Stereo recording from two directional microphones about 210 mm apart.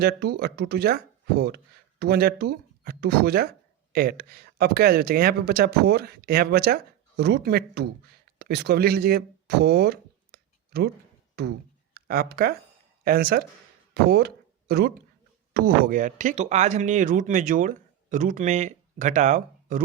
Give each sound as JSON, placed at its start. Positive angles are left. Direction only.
{"t": 0.0, "sound": "speech", "side_deg": -50}